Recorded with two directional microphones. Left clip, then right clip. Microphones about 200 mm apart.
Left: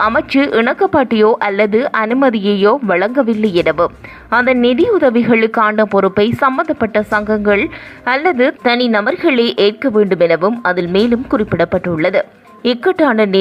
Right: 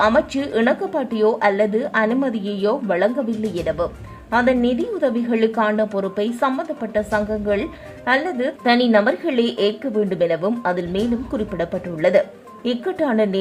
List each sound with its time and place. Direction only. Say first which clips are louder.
0.0 s a woman's voice: left 4 dB; 15° left (ahead or behind)